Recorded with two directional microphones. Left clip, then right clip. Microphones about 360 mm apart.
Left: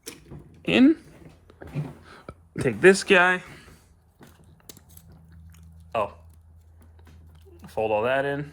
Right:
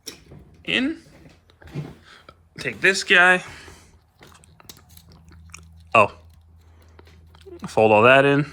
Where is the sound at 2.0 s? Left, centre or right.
Centre.